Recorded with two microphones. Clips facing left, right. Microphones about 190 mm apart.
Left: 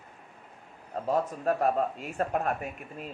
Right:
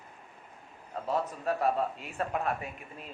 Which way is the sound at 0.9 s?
45° left (ahead or behind).